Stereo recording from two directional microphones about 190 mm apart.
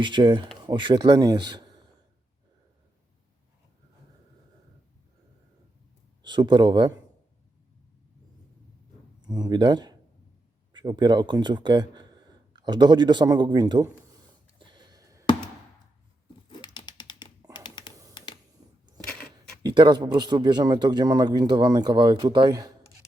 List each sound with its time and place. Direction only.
0.0 s a man's voice: 25° right (ahead or behind)
6.2 s a man's voice: 25° right (ahead or behind)
9.2 s a man's voice: 20° right (ahead or behind)
14.6 s a sound: 25° right (ahead or behind)
16.5 s typing: 25° left (ahead or behind)
17.5 s tap: 25° left (ahead or behind)
19.6 s a man's voice: 25° right (ahead or behind)